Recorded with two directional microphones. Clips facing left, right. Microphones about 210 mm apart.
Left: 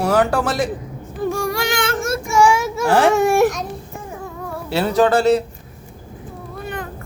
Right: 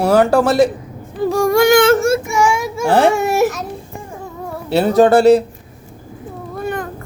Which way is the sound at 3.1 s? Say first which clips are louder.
Left 1 dB; 5° right (ahead or behind).